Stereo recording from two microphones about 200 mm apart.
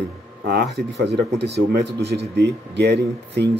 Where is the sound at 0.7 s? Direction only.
55° right (ahead or behind).